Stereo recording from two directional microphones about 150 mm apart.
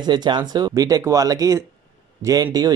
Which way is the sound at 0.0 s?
30° right (ahead or behind).